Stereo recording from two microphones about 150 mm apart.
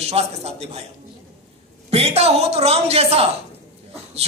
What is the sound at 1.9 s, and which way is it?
A man's voice, 40° right (ahead or behind).